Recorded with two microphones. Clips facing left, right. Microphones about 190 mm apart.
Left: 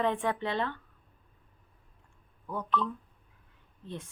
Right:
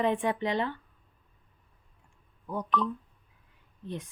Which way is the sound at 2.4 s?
15° right (ahead or behind).